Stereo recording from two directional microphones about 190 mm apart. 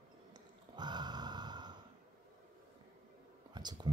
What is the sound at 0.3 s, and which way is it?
Sigh, 25° right (ahead or behind).